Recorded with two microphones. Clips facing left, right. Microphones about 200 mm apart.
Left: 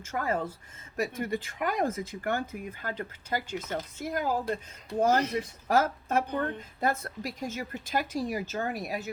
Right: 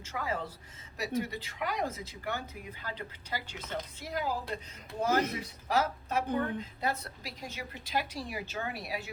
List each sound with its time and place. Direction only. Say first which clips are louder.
0.0 s speech: left 5 dB; 50° left (ahead or behind)